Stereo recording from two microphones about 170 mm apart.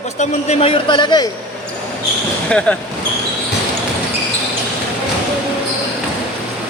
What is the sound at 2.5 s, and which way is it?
Speech, 5° left (ahead or behind).